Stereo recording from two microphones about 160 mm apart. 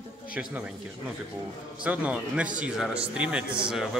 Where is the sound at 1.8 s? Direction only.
5° right (ahead or behind).